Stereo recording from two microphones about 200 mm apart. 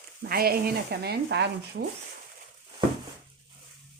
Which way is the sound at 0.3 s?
50° right (ahead or behind).